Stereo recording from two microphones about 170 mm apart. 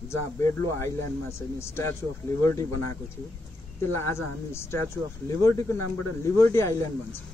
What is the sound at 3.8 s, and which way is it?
Speech, 15° left (ahead or behind).